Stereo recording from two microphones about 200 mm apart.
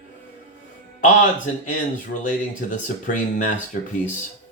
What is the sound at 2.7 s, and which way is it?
Speech, 40° left (ahead or behind).